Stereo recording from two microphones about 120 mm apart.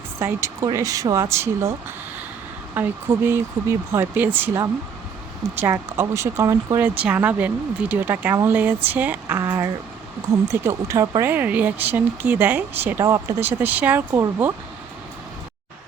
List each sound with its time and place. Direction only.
0.2 s speech: 25° right (ahead or behind)
2.7 s speech: 20° right (ahead or behind)
7.0 s speech: 10° right (ahead or behind)
9.4 s speech: 25° right (ahead or behind)